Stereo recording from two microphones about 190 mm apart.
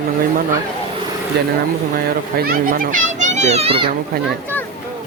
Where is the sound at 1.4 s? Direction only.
60° right (ahead or behind).